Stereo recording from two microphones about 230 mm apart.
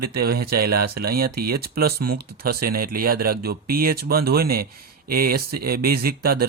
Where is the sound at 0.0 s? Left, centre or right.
Right.